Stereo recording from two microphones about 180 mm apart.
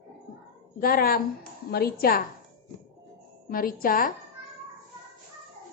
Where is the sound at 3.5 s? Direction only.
50° left (ahead or behind).